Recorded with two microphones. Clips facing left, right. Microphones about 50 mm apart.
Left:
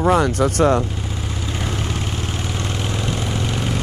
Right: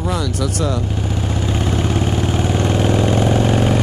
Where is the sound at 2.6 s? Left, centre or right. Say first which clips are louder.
Right 10 dB; right.